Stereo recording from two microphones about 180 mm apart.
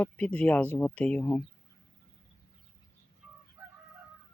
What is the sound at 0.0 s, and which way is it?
Speech, 10° left (ahead or behind).